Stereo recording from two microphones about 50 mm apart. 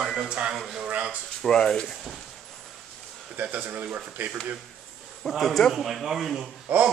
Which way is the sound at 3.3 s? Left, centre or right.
Right.